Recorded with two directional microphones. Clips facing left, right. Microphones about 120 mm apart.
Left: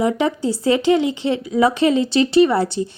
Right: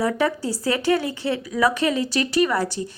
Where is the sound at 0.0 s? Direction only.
20° left (ahead or behind).